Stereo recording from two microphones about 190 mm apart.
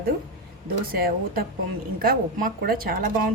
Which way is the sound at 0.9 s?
50° right (ahead or behind).